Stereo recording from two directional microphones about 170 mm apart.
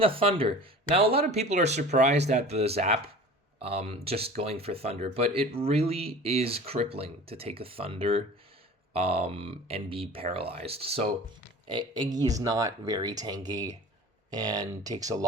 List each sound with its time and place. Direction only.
0.0 s speech: 30° right (ahead or behind)